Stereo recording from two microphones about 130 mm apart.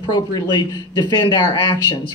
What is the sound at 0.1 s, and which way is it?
Speech, 35° left (ahead or behind).